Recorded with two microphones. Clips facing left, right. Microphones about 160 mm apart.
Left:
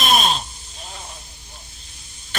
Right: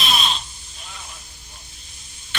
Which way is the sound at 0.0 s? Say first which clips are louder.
Left 5 dB; 45° left (ahead or behind).